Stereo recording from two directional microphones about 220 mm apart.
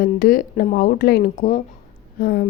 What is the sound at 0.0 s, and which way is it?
A woman's voice, 40° left (ahead or behind).